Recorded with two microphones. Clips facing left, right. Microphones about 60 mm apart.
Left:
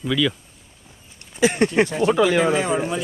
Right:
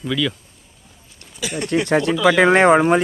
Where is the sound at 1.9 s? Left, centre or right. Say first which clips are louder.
Right 2 dB; right.